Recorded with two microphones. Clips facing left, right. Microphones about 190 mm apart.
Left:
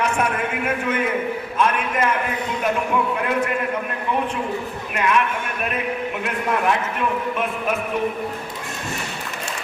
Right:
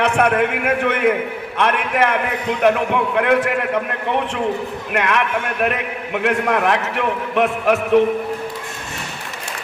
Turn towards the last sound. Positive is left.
turn(degrees=-80)